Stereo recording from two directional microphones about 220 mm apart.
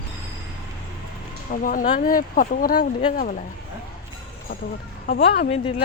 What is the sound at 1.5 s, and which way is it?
Speech, 40° left (ahead or behind).